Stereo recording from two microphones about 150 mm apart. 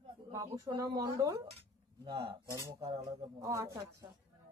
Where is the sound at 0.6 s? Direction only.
25° right (ahead or behind).